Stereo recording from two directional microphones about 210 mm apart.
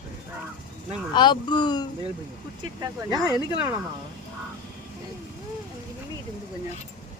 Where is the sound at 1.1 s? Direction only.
20° left (ahead or behind).